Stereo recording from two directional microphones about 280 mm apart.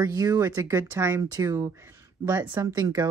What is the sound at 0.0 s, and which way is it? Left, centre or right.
Speech, centre.